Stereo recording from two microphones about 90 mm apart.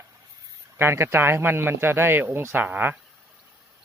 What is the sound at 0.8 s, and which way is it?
A man's voice, 30° right (ahead or behind).